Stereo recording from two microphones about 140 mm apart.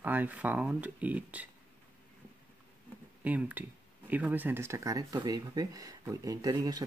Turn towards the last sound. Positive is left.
turn(degrees=-25)  # may be behind; listen again after turning